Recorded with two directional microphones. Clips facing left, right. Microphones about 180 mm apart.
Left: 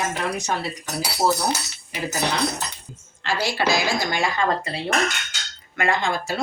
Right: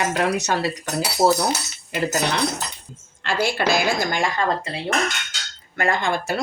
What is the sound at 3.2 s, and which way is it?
Speech, 55° right (ahead or behind).